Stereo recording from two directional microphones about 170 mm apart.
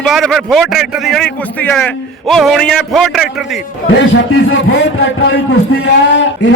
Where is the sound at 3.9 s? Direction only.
90° left.